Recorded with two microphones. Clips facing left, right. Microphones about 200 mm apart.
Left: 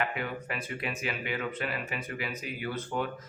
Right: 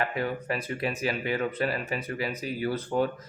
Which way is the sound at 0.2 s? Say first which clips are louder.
Right 6 dB; 35° right (ahead or behind).